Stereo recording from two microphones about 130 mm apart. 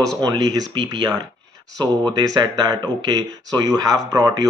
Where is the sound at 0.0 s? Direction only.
30° right (ahead or behind).